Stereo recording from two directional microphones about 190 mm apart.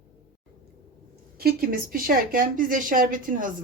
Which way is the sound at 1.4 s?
55° right (ahead or behind).